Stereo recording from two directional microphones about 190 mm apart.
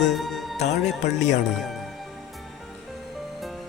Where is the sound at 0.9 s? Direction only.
40° left (ahead or behind).